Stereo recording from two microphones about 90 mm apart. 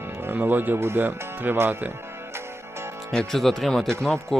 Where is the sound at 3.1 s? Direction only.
5° left (ahead or behind).